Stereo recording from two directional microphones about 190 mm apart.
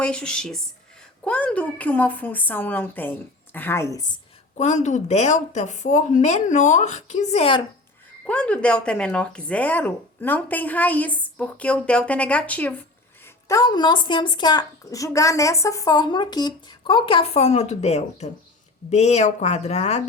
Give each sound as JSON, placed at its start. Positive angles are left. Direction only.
{"t": 0.0, "sound": "a woman's voice", "side_deg": 5}
{"t": 4.5, "sound": "speech", "side_deg": 40}
{"t": 8.3, "sound": "a woman's voice", "side_deg": 5}